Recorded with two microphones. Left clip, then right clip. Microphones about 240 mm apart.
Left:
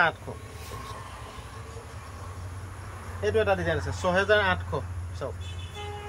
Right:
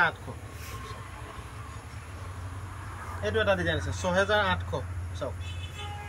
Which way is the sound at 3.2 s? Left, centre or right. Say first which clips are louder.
Left 2 dB; left.